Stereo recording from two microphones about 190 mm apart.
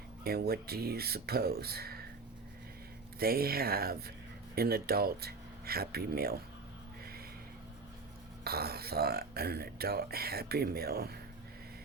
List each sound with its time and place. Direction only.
0.3 s speech: 55° right (ahead or behind)
3.2 s speech: 55° right (ahead or behind)
8.4 s speech: 55° right (ahead or behind)